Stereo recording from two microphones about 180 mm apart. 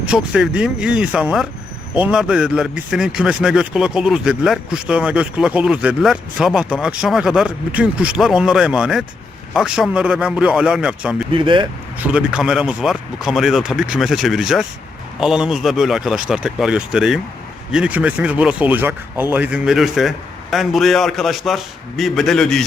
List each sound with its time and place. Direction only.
0.0 s a man's voice: 5° right (ahead or behind)
11.3 s speech: 25° right (ahead or behind)
11.9 s a man's voice: 10° right (ahead or behind)